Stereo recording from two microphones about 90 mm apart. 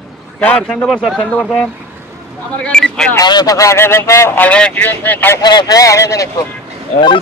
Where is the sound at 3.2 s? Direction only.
45° left (ahead or behind); by 4.3 s 30° left (ahead or behind).